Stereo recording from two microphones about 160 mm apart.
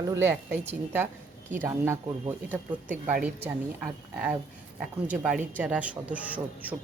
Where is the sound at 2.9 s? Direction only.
10° right (ahead or behind).